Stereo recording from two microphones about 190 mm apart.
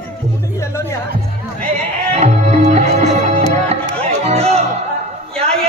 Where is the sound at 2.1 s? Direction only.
35° right (ahead or behind).